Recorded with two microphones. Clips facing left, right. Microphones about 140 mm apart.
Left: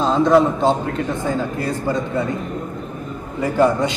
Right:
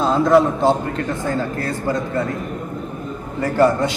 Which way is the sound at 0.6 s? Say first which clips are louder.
Even; 20° left (ahead or behind).